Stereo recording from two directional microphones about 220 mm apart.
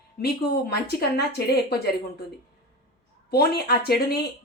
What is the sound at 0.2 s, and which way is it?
Speech, 45° left (ahead or behind).